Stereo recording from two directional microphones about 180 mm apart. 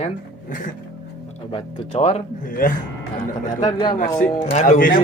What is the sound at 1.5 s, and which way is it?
Speech, 35° left (ahead or behind).